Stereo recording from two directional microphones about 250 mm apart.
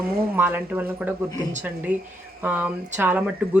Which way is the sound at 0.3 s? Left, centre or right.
Centre.